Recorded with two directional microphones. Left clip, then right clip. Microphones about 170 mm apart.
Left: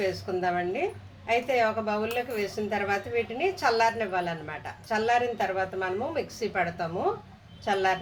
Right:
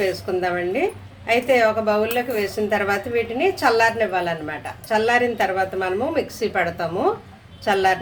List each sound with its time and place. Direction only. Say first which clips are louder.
0.0 s a woman's voice: right 6 dB; 15° right (ahead or behind)